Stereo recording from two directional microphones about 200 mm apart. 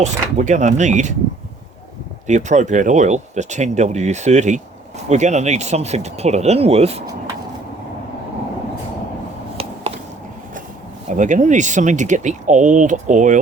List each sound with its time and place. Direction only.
0.0 s speech: 35° right (ahead or behind)
2.2 s speech: 35° right (ahead or behind)
11.1 s speech: 40° right (ahead or behind)